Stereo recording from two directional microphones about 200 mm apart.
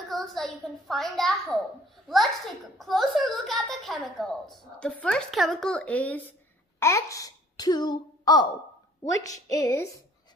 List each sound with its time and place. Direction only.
0.1 s a child's voice: centre (ahead or behind)